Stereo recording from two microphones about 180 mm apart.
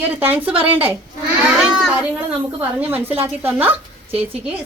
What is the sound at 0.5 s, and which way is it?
Speech, 30° right (ahead or behind).